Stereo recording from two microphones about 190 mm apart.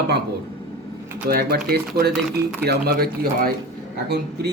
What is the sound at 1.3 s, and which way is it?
A man's voice, 55° right (ahead or behind).